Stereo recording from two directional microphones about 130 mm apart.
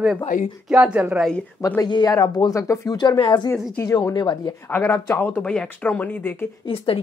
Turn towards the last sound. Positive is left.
turn(degrees=45)  # may be behind; listen again after turning